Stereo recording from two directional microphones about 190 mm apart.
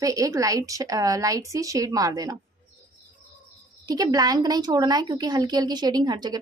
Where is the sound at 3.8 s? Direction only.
20° right (ahead or behind).